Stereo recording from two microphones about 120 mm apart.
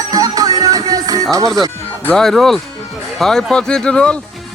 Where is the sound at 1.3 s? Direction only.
30° right (ahead or behind).